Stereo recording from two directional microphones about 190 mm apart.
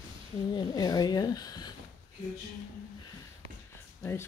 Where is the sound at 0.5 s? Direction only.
20° left (ahead or behind).